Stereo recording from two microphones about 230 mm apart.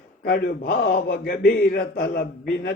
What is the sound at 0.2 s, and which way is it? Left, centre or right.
A man's voice, left.